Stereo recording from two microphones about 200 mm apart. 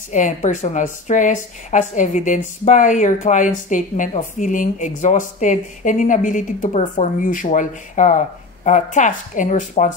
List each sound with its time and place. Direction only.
0.1 s a woman's voice: 40° left (ahead or behind)